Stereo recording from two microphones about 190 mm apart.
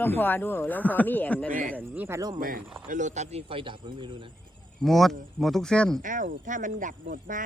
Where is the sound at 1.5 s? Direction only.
45° right (ahead or behind).